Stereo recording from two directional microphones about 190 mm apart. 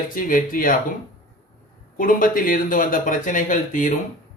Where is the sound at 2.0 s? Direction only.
45° left (ahead or behind).